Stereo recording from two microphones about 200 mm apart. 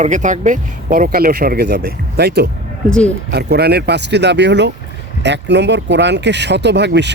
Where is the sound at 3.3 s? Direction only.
55° right (ahead or behind).